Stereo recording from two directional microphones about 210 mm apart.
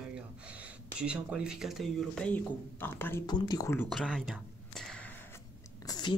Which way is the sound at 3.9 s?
Centre (ahead or behind).